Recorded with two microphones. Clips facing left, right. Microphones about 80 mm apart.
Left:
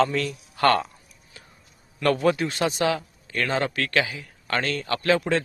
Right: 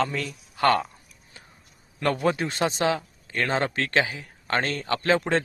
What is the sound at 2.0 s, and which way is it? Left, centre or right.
A man's voice, centre.